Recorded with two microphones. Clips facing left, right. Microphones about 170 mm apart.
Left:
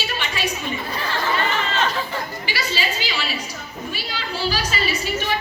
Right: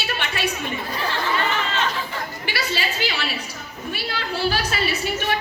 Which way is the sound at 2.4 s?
60° right (ahead or behind).